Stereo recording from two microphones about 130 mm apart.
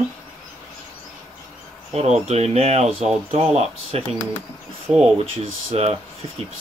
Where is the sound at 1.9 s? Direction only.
55° right (ahead or behind).